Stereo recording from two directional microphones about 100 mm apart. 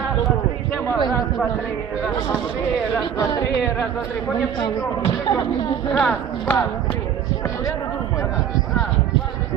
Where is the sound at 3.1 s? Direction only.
35° left (ahead or behind).